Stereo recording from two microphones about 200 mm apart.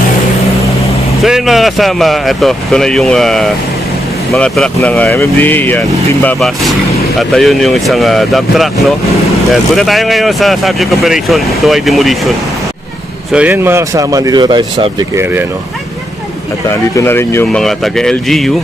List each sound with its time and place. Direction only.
1.2 s speech: centre (ahead or behind)
13.3 s speech: 10° right (ahead or behind)
16.6 s speech: 10° left (ahead or behind)